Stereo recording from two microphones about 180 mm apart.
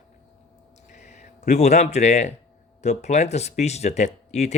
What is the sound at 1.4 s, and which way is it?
Speech, 40° left (ahead or behind).